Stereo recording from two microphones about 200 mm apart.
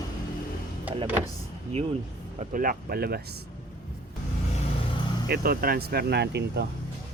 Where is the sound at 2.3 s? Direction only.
45° right (ahead or behind).